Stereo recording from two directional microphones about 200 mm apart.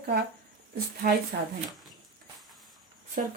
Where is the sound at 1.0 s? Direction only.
45° right (ahead or behind).